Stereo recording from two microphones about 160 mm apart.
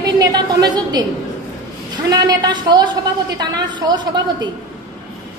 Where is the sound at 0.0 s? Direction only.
25° right (ahead or behind).